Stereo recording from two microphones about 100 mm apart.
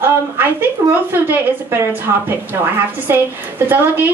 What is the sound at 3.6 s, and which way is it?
Speech, 20° right (ahead or behind).